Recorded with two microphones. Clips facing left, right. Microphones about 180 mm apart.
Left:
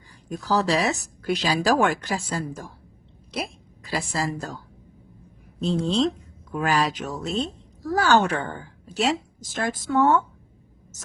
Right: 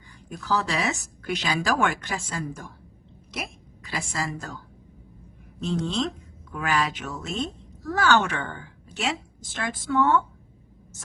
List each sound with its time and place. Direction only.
0.3 s a woman's voice: 35° left (ahead or behind)
5.5 s speech: 35° left (ahead or behind)